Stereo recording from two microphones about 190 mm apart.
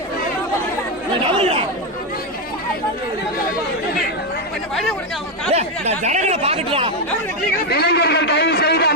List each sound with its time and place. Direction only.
1.4 s speech: 30° right (ahead or behind)
5.5 s speech: 35° right (ahead or behind)
7.7 s a man's voice: 60° left (ahead or behind)